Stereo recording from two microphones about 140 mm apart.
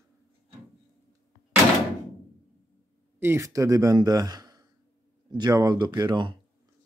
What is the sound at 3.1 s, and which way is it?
Speech, 20° right (ahead or behind).